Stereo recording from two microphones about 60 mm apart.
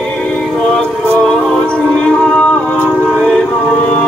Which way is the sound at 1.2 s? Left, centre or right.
Centre.